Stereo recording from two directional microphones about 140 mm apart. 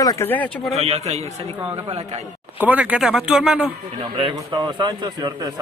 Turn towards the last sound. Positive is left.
turn(degrees=-30)  # may be behind; listen again after turning